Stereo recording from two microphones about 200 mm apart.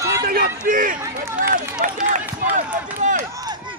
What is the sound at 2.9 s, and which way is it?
Run, 40° right (ahead or behind).